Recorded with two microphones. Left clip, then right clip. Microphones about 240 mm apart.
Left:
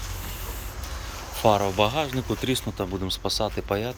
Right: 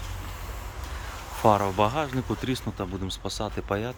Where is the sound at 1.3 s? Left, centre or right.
Centre.